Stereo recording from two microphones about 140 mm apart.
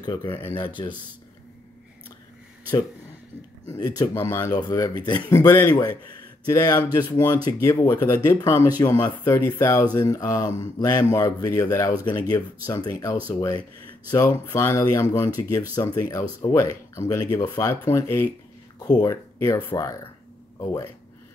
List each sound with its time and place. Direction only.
0.0 s speech: 30° left (ahead or behind)
0.3 s speech: 20° left (ahead or behind)
4.0 s speech: 20° left (ahead or behind)